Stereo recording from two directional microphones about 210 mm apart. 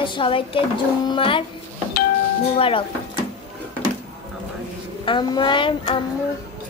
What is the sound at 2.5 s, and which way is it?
Speech, 25° left (ahead or behind).